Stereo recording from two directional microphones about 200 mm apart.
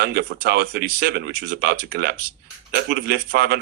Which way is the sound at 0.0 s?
50° right (ahead or behind).